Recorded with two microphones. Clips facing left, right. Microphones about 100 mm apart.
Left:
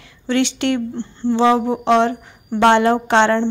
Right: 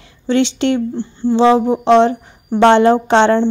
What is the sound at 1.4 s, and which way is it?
A woman's voice, 20° right (ahead or behind).